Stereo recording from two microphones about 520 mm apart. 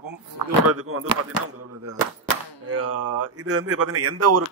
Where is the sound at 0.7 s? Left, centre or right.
Right.